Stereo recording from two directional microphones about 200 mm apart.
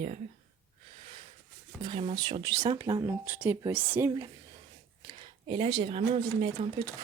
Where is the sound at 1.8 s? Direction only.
25° right (ahead or behind).